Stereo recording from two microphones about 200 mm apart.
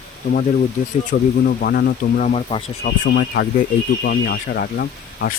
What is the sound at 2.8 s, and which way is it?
Speech, 55° left (ahead or behind).